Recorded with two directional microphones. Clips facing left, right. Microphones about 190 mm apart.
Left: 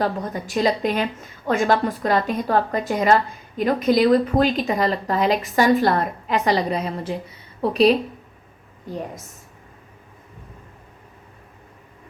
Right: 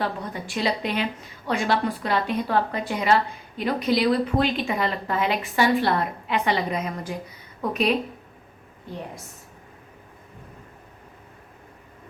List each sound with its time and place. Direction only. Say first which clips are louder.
0.0 s a woman's voice: left 5 dB; 40° left (ahead or behind)